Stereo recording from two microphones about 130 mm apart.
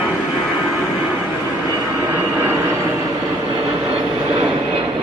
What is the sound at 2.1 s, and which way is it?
Vehicle, 20° right (ahead or behind).